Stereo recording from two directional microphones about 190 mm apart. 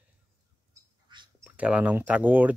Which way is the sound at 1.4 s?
5° right (ahead or behind).